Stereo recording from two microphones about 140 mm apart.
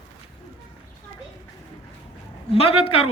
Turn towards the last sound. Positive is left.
turn(degrees=45)  # may be behind; listen again after turning